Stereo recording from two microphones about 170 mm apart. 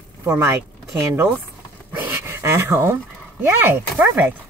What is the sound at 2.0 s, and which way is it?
Pant, 15° right (ahead or behind).